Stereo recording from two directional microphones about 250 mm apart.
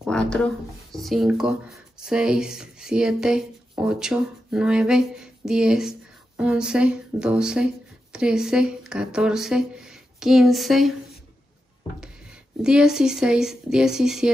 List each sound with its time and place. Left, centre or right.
0.0 s speech: centre
12.6 s speech: centre